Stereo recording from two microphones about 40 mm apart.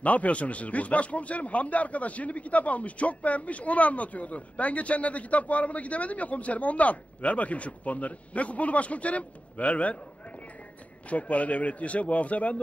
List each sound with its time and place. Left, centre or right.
0.0 s speech: left
11.1 s speech: left